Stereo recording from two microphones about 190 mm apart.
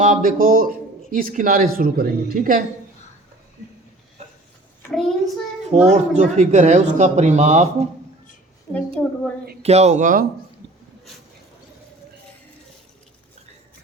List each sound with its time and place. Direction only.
0.0 s speech: 45° right (ahead or behind)
4.9 s a child's voice: centre (ahead or behind)
5.9 s speech: 40° right (ahead or behind)
8.7 s a woman's voice: 5° left (ahead or behind)
9.6 s speech: 35° right (ahead or behind)
10.6 s a sound: 65° right (ahead or behind)